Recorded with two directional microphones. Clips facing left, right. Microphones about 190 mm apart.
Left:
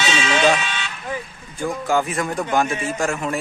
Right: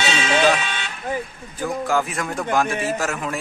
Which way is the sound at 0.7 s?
50° right (ahead or behind).